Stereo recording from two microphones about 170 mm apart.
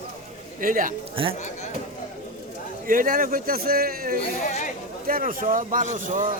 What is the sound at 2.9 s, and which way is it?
A man's voice, 55° right (ahead or behind).